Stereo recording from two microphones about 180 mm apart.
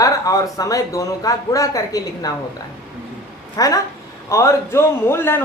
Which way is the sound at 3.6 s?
20° left (ahead or behind).